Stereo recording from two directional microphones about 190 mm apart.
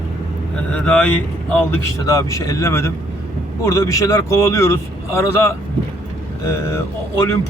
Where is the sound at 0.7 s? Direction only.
5° left (ahead or behind).